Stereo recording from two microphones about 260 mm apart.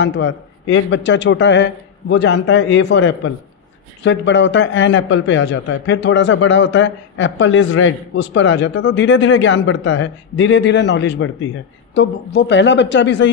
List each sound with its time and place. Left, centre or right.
0.0 s a man's voice: left